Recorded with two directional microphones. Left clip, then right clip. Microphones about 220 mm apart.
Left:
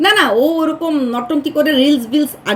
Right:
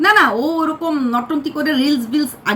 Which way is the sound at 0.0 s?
Centre (ahead or behind).